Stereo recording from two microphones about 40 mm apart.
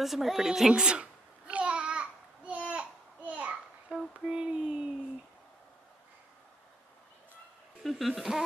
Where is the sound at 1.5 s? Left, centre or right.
Right.